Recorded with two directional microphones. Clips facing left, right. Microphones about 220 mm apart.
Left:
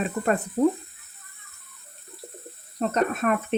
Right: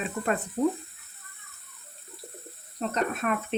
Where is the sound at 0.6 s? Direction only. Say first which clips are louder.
Left 4 dB; 65° left (ahead or behind).